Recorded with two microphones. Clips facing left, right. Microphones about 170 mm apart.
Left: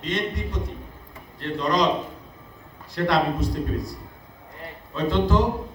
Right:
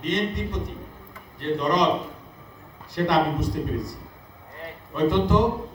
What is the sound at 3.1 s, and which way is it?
Speech, 20° right (ahead or behind).